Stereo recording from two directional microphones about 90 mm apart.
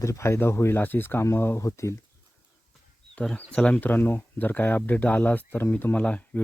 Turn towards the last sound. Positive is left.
turn(degrees=15)  # may be behind; listen again after turning